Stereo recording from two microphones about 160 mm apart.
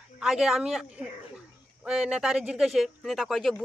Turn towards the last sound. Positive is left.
turn(degrees=0)  # may be behind; listen again after turning